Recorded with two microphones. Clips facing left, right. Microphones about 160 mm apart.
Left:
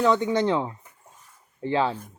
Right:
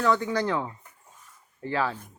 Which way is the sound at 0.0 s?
20° left (ahead or behind).